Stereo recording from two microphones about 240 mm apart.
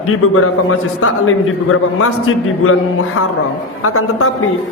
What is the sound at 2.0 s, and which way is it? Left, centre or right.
Speech, left.